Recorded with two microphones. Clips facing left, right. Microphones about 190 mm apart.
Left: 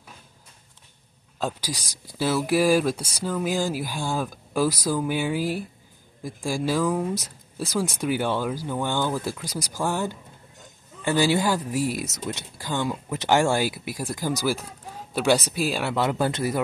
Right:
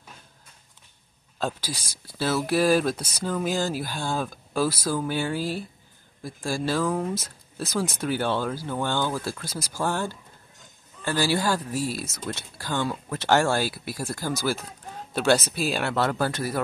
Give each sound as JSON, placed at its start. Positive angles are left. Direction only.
{"t": 1.4, "sound": "speech", "side_deg": 15}